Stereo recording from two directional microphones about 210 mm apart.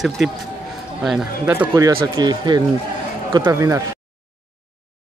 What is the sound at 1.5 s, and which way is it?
Speech, 15° right (ahead or behind).